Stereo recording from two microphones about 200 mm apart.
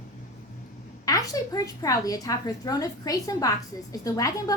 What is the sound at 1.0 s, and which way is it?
A woman's voice, 15° left (ahead or behind).